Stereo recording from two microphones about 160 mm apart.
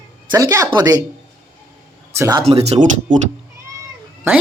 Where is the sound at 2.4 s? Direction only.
40° right (ahead or behind).